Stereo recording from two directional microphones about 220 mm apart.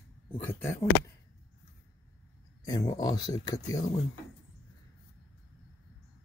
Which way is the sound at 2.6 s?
15° left (ahead or behind).